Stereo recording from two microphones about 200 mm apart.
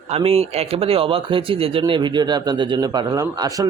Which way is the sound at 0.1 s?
30° right (ahead or behind).